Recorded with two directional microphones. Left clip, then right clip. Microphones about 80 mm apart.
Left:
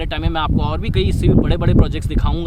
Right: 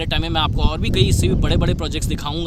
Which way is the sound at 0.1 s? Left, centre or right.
Right.